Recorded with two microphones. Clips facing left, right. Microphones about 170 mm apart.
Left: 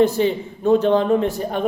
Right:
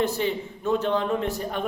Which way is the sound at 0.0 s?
30° left (ahead or behind).